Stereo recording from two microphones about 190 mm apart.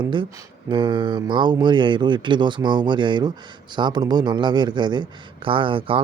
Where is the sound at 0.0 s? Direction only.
25° right (ahead or behind).